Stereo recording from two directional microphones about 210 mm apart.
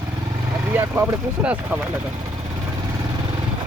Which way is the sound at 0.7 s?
10° right (ahead or behind).